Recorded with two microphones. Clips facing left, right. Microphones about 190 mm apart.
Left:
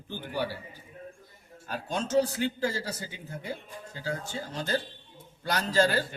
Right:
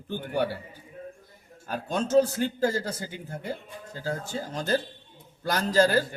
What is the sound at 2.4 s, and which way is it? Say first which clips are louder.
Speech: right 4 dB; 45° right (ahead or behind).